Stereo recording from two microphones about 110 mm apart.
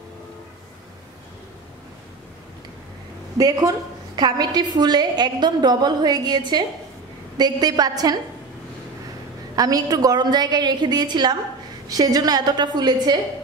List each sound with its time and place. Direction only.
3.3 s a woman's voice: 35° right (ahead or behind)
9.6 s a woman's voice: 35° right (ahead or behind)